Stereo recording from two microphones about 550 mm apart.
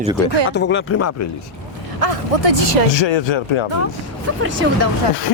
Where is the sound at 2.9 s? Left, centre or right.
Left.